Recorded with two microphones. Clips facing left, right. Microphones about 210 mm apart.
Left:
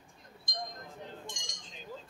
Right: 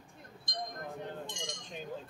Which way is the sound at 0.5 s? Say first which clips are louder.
Right 3 dB; 60° right (ahead or behind).